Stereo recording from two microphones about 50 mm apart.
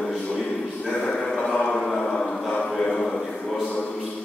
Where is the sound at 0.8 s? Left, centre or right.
Left.